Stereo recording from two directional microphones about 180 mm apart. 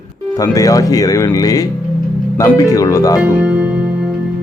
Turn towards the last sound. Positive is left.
turn(degrees=-5)  # may be behind; listen again after turning